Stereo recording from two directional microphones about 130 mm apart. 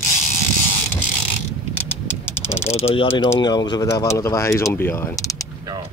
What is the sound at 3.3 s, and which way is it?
Speech, 35° left (ahead or behind).